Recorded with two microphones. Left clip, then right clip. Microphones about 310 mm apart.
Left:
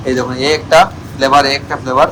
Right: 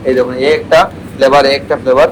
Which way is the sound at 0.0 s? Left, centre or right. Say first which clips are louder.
Right 4 dB; centre.